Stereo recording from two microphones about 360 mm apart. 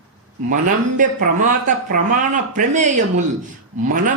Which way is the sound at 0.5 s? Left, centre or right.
Right.